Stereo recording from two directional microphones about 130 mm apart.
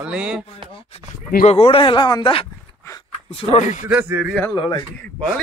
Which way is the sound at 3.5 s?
65° left (ahead or behind).